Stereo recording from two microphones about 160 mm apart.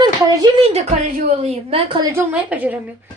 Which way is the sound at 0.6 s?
40° right (ahead or behind).